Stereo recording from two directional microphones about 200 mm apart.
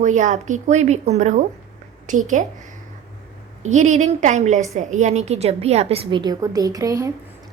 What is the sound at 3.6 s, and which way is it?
A woman's voice, 35° right (ahead or behind).